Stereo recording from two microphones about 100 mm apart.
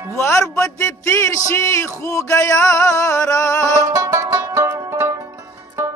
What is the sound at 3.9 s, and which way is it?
Music, 30° right (ahead or behind).